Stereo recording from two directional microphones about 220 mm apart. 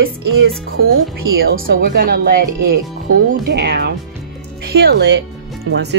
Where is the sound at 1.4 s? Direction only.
45° right (ahead or behind).